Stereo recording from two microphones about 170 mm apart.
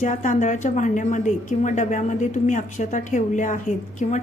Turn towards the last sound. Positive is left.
turn(degrees=45)  # may be behind; listen again after turning